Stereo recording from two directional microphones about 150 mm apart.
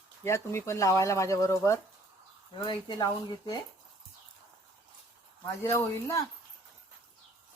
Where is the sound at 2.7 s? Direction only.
30° left (ahead or behind).